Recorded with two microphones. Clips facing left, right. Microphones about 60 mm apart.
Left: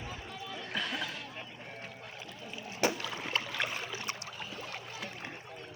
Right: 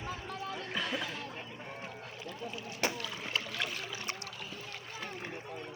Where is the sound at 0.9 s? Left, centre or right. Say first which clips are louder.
Right 1 dB; centre.